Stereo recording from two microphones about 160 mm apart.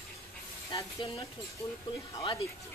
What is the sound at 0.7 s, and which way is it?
Sizzle, 35° left (ahead or behind).